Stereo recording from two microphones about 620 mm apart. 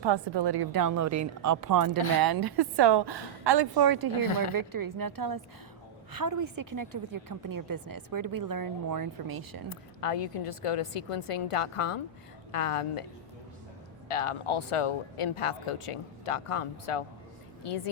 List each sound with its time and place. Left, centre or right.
0.0 s a woman's voice: right
4.1 s speech: left
4.5 s a woman's voice: right
9.6 s a woman's voice: left
14.1 s speech: left